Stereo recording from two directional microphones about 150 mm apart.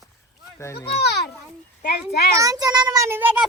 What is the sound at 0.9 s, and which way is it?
Speech, 90° left.